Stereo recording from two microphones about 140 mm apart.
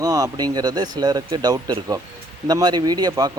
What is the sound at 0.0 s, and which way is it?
Speech, 25° right (ahead or behind).